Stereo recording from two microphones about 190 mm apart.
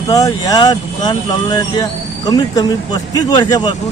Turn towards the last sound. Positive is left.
turn(degrees=20)  # may be behind; listen again after turning